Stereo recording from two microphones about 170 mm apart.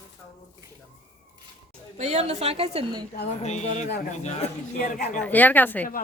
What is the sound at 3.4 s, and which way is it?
Speech, 40° left (ahead or behind).